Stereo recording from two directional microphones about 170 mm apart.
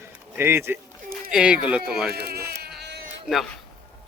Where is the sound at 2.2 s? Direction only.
70° right (ahead or behind).